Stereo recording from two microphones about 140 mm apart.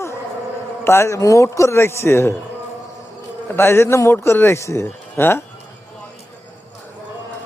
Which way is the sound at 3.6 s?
15° left (ahead or behind).